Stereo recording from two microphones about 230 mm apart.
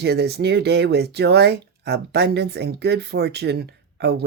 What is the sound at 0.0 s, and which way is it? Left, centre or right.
Speech, right.